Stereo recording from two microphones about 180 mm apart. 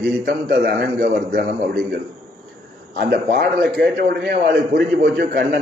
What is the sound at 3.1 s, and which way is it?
A man's voice, 60° right (ahead or behind).